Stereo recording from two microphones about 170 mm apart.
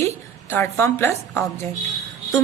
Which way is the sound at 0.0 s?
15° left (ahead or behind).